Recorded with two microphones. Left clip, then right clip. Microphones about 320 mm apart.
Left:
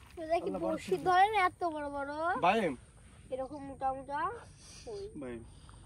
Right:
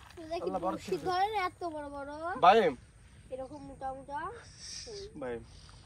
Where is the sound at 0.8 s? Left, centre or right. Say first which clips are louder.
Left 9 dB; left.